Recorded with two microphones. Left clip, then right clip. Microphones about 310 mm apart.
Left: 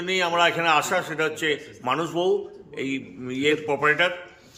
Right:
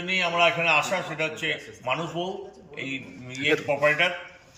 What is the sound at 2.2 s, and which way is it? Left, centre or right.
Mantra, left.